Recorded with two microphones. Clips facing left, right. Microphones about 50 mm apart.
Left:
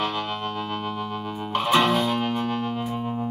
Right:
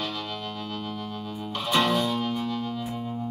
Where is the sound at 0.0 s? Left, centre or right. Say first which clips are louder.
Left 6 dB; left.